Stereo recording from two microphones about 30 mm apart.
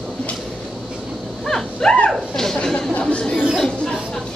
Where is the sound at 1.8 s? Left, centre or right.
Left.